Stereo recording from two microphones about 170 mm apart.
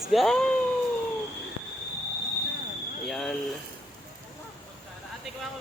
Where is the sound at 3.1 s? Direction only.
Centre (ahead or behind).